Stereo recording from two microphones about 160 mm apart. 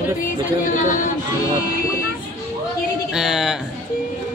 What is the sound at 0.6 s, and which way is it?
Speech, 55° left (ahead or behind).